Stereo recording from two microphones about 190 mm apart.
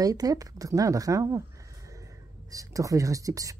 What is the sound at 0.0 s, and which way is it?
Speech, 20° right (ahead or behind).